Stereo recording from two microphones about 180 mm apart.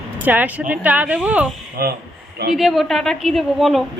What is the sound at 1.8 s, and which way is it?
Speech, 55° right (ahead or behind).